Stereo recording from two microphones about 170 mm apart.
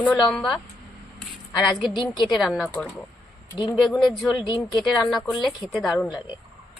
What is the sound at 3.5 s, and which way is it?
Speech, 25° left (ahead or behind).